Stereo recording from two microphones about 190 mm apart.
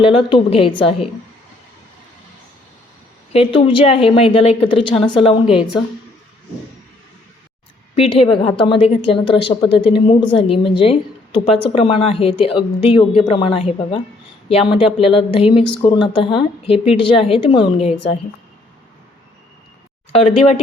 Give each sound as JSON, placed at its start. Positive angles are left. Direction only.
{"t": 0.0, "sound": "a woman's voice", "side_deg": 25}
{"t": 3.3, "sound": "a woman's voice", "side_deg": 30}
{"t": 7.9, "sound": "a woman's voice", "side_deg": 30}
{"t": 14.8, "sound": "speech", "side_deg": -5}
{"t": 15.1, "sound": "a woman's voice", "side_deg": 30}
{"t": 20.1, "sound": "a woman's voice", "side_deg": 30}